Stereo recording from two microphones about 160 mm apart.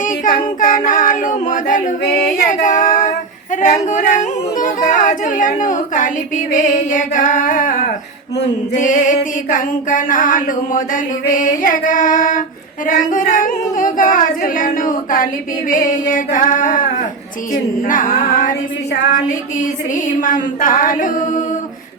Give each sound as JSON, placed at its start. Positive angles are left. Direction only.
{"t": 0.0, "sound": "child singing", "side_deg": 55}
{"t": 2.5, "sound": "female singing", "side_deg": 55}
{"t": 3.5, "sound": "yodeling", "side_deg": 50}
{"t": 8.7, "sound": "music", "side_deg": 50}
{"t": 19.9, "sound": "music", "side_deg": 55}